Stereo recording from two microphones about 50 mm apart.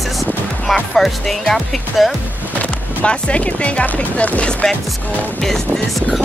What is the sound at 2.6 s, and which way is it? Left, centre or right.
Speech, left.